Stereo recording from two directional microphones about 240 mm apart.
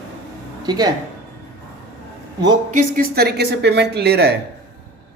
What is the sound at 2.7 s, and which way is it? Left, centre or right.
A woman's voice, right.